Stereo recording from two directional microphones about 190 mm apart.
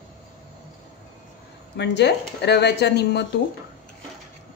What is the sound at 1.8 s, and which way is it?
A woman's voice, 65° left (ahead or behind).